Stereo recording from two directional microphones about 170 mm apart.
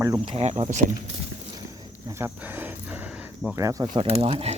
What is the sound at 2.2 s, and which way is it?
Dog, 10° right (ahead or behind).